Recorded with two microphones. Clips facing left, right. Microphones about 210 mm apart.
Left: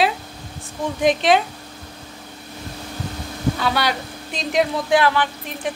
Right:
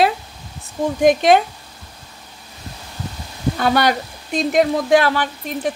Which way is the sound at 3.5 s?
50° right (ahead or behind).